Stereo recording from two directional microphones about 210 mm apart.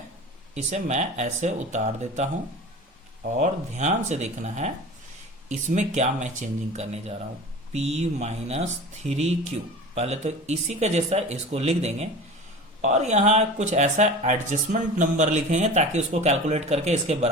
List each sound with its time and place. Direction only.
0.5 s speech: 35° right (ahead or behind)
3.3 s speech: 35° right (ahead or behind)